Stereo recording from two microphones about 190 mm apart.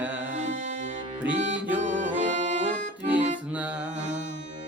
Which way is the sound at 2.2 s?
40° right (ahead or behind).